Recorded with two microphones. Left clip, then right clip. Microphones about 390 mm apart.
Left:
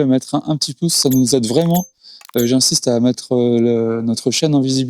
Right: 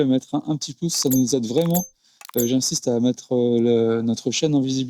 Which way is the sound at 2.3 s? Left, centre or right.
Centre.